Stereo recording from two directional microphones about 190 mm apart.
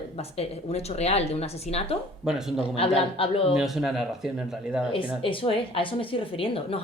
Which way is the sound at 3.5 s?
Centre (ahead or behind).